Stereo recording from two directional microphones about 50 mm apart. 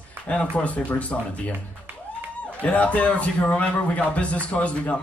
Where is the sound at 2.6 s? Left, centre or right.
Left.